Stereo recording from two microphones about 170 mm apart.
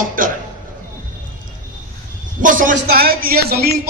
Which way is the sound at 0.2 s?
55° right (ahead or behind).